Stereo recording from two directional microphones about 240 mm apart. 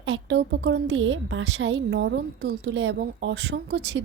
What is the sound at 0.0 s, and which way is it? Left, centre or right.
A woman's voice, right.